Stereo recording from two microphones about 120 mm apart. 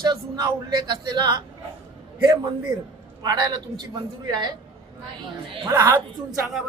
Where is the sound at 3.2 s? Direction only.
35° right (ahead or behind).